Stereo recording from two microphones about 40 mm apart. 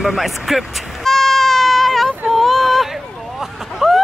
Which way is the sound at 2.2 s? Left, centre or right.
Centre.